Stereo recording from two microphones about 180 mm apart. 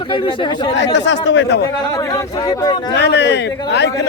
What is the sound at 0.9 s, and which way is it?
Speech, 85° left.